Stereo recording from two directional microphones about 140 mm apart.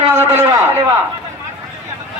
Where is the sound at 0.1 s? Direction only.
20° right (ahead or behind).